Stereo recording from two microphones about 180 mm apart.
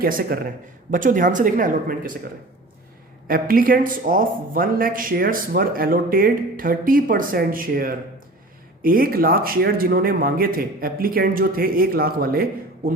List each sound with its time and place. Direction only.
0.0 s a man's voice: 55° right (ahead or behind)
3.2 s a man's voice: 50° right (ahead or behind)